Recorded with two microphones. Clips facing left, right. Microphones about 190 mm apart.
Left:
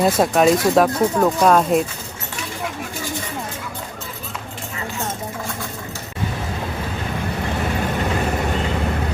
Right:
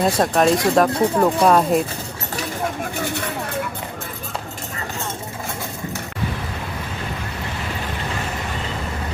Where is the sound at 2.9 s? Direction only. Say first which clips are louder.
Right 3 dB; 65° right (ahead or behind).